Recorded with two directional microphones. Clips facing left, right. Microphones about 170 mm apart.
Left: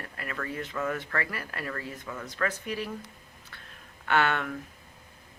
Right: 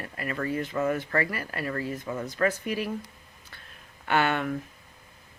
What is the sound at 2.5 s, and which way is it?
Speech, 10° right (ahead or behind).